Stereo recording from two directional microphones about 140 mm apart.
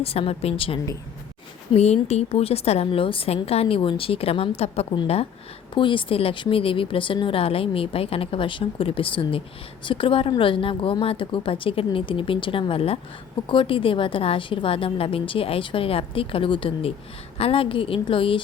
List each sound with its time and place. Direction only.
0.0 s a woman's voice: 45° left (ahead or behind)